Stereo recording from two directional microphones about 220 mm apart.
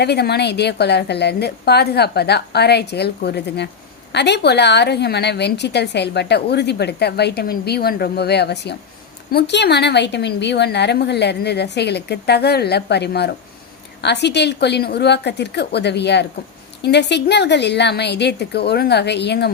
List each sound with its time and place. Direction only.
0.0 s a woman's voice: 50° left (ahead or behind)